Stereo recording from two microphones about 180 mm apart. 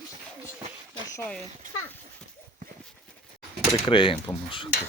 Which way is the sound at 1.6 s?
50° right (ahead or behind).